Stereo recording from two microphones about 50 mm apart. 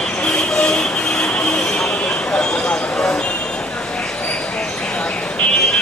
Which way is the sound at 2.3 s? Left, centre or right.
Centre.